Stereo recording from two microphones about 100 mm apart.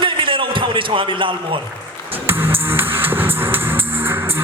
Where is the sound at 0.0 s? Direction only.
60° right (ahead or behind).